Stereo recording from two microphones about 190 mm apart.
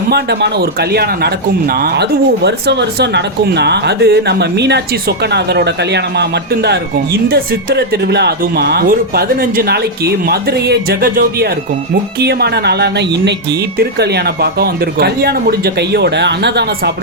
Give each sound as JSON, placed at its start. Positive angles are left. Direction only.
{"t": 0.1, "sound": "speech", "side_deg": -60}